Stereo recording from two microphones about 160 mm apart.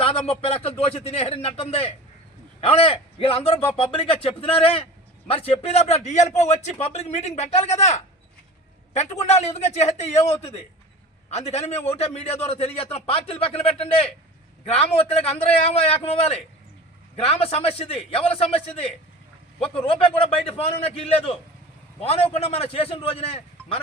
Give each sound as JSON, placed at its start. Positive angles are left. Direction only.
{"t": 0.0, "sound": "a man's voice", "side_deg": 35}